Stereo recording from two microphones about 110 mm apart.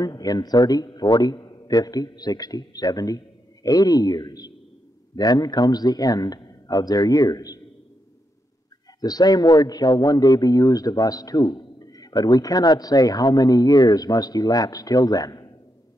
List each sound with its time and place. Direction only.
0.0 s a man's voice: 35° left (ahead or behind)
9.0 s a man's voice: 35° left (ahead or behind)